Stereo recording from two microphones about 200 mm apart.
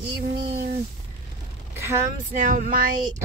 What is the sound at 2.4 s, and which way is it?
Music, 40° right (ahead or behind).